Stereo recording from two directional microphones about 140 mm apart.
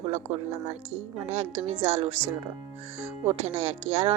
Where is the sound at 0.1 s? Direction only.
50° right (ahead or behind).